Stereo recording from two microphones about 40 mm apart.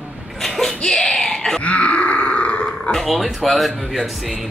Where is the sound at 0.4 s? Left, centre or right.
Centre.